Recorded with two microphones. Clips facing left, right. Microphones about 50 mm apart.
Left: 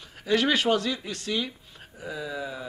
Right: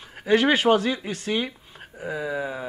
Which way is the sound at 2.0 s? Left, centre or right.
Right.